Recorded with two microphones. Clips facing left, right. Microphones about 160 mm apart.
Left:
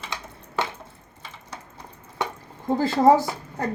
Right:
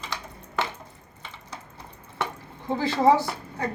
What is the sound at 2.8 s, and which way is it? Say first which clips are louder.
Speech: left 3 dB; 45° left (ahead or behind).